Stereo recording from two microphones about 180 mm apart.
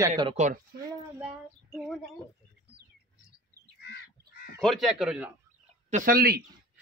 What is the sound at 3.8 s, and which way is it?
Crow, 65° left (ahead or behind).